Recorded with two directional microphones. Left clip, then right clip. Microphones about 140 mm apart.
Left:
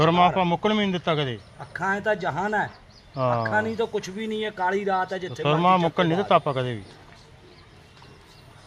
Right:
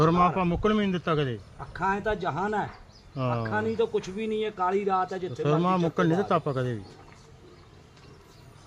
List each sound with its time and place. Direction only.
0.0 s a man's voice: 45° right (ahead or behind); by 1.4 s 30° right (ahead or behind)
1.8 s speech: 10° right (ahead or behind)
3.2 s a man's voice: 35° right (ahead or behind)
3.4 s speech: 10° right (ahead or behind)
5.3 s a man's voice: 35° right (ahead or behind)